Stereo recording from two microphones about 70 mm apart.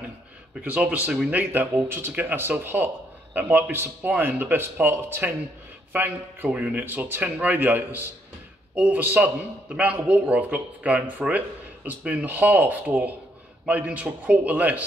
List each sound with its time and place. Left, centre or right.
0.6 s speech: right